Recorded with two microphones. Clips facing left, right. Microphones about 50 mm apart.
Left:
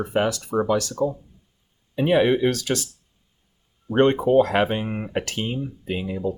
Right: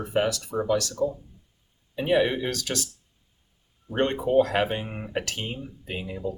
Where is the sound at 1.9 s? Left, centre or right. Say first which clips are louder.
Left 4 dB; left.